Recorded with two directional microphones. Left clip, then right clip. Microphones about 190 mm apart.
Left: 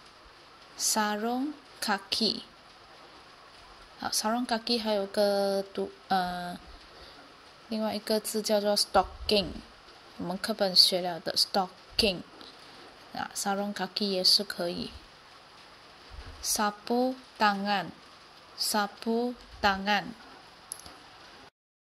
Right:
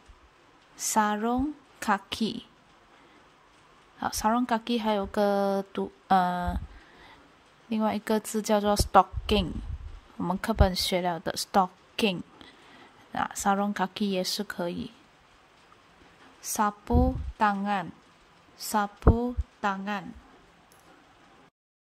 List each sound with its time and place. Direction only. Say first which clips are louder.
0.9 s speech: right 5 dB; 45° right (ahead or behind)
4.0 s speech: right 3 dB; 50° right (ahead or behind)
7.7 s speech: right 2 dB; 50° right (ahead or behind)
16.5 s a woman's voice: right 2 dB; 45° right (ahead or behind)